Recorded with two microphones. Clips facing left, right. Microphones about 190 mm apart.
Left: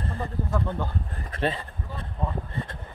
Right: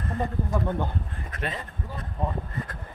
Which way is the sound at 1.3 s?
30° left (ahead or behind).